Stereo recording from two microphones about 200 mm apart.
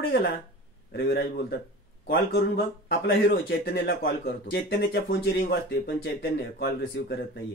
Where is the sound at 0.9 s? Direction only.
50° left (ahead or behind).